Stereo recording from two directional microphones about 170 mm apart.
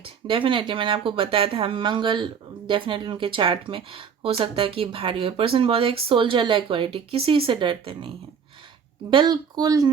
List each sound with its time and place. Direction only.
0.0 s speech: 30° right (ahead or behind)